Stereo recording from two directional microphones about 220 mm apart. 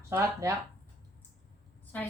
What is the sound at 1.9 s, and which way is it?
Speech, 5° left (ahead or behind).